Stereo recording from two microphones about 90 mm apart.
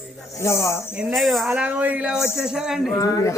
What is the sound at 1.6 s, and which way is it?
Speech, 15° right (ahead or behind).